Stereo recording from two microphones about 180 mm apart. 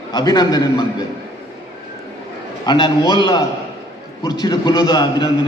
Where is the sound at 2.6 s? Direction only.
25° left (ahead or behind).